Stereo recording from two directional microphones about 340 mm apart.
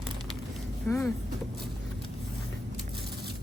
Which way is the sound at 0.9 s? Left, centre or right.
Centre.